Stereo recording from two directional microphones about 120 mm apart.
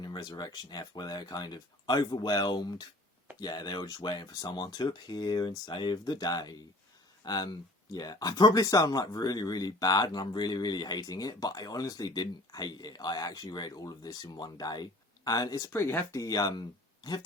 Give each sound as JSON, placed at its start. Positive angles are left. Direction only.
{"t": 0.0, "sound": "speech", "side_deg": 35}